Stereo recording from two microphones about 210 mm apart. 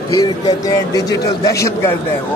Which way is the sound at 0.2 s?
20° left (ahead or behind).